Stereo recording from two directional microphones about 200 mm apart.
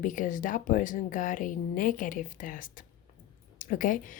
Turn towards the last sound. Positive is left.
turn(degrees=40)  # may be behind; listen again after turning